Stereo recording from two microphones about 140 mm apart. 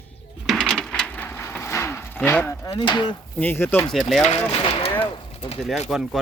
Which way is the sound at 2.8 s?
35° left (ahead or behind).